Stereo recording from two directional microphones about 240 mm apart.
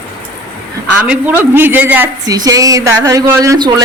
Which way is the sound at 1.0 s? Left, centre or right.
Centre.